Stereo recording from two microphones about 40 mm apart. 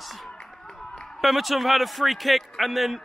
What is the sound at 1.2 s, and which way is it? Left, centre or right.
A man's voice, centre.